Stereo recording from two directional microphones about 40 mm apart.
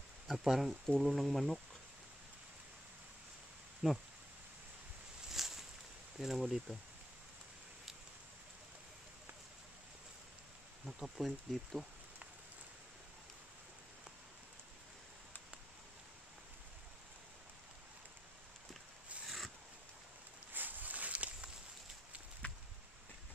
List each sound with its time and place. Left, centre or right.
0.3 s speech: centre
3.8 s speech: centre
5.3 s a sound: centre
6.1 s speech: centre
10.9 s speech: centre
19.2 s zipper: centre
20.5 s a sound: right